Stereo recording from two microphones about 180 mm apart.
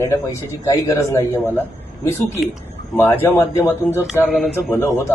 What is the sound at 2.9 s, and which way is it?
Speech, 10° left (ahead or behind).